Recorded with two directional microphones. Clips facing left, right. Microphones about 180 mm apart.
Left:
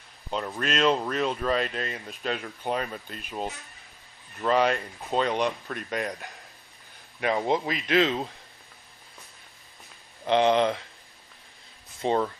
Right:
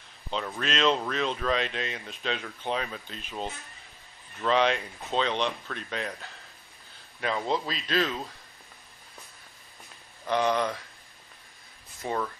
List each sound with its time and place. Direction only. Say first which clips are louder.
0.5 s a man's voice: left 2 dB; 5° left (ahead or behind); by 8.3 s 25° left (ahead or behind)
10.2 s a man's voice: left 5 dB; 25° left (ahead or behind)
12.0 s speech: left 6 dB; 30° left (ahead or behind)